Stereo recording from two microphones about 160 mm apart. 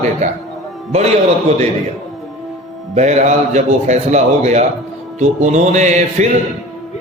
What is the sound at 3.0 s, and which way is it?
A man's voice, 45° right (ahead or behind).